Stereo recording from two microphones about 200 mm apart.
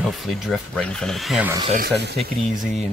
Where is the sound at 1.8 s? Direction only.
55° right (ahead or behind).